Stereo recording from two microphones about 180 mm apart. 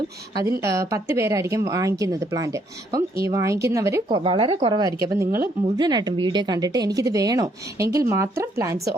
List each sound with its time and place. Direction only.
0.3 s a woman's voice: 15° right (ahead or behind)
4.2 s speech: 30° right (ahead or behind)